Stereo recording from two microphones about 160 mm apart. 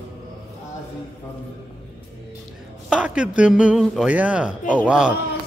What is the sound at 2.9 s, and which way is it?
A man's voice, 5° right (ahead or behind).